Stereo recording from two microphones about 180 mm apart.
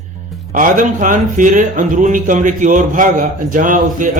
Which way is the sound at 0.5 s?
45° right (ahead or behind).